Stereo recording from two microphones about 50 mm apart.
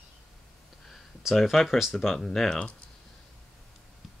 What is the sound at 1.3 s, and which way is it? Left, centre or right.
Speech, centre.